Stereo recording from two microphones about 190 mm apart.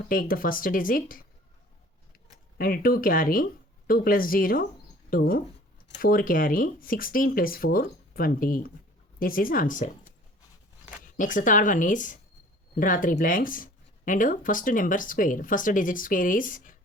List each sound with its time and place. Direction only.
0.1 s speech: 50° left (ahead or behind)
2.6 s speech: 50° left (ahead or behind)